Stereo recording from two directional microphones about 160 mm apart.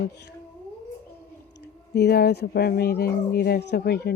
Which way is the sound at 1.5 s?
90° left.